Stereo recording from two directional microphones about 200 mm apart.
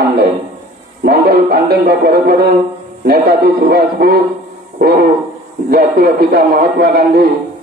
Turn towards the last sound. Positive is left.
turn(degrees=-50)  # may be behind; listen again after turning